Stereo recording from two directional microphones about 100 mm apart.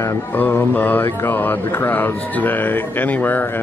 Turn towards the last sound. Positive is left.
turn(degrees=20)  # may be behind; listen again after turning